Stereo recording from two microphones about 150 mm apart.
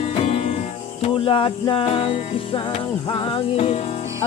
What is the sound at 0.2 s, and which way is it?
Music, 40° left (ahead or behind).